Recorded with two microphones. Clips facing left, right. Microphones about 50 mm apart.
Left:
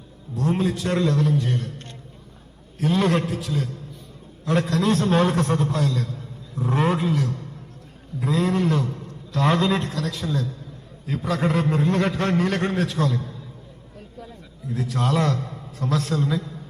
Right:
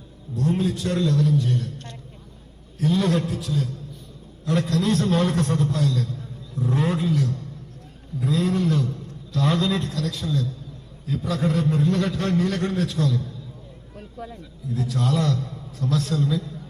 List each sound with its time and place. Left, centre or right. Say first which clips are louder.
0.3 s a man's voice: even; left
14.7 s a man's voice: left 1 dB; left